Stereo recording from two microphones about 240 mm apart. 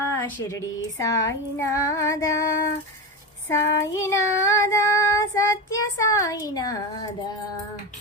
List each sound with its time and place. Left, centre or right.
0.0 s child singing: centre